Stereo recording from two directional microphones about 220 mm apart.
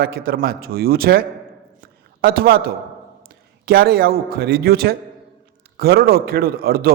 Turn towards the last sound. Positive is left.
turn(degrees=-40)  # may be behind; listen again after turning